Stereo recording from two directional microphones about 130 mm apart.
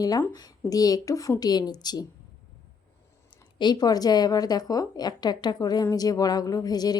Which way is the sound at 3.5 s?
35° left (ahead or behind).